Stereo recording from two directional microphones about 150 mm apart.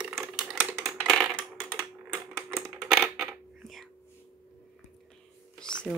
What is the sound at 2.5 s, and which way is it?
Coin, centre (ahead or behind).